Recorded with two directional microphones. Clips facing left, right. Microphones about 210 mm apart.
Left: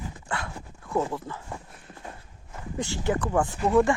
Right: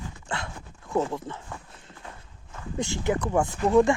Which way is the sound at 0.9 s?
20° right (ahead or behind).